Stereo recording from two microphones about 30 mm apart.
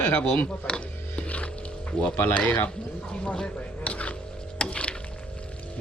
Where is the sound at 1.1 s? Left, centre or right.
Left.